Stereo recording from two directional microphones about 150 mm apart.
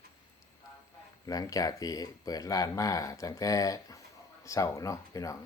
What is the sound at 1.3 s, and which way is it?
Speech, 25° left (ahead or behind).